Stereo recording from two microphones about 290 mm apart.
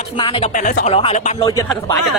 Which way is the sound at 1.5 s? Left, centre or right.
Centre.